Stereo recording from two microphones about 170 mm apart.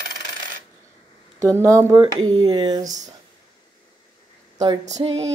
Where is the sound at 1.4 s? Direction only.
20° right (ahead or behind).